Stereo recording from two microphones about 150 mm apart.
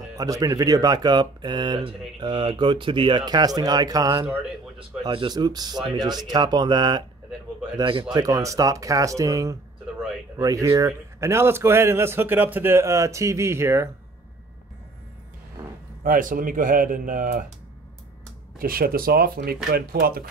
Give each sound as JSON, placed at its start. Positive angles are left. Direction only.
{"t": 0.1, "sound": "speech", "side_deg": -25}
{"t": 8.1, "sound": "a man's voice", "side_deg": -25}
{"t": 16.0, "sound": "speech", "side_deg": -65}
{"t": 18.6, "sound": "speech", "side_deg": -75}